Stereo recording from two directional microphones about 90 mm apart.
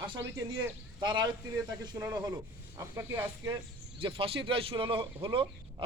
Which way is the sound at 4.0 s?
85° right.